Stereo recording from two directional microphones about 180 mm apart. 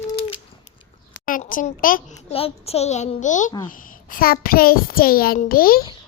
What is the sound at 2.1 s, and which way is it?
A child's voice, 35° left (ahead or behind).